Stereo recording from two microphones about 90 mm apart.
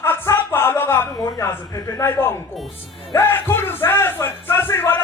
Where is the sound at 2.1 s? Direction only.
25° left (ahead or behind).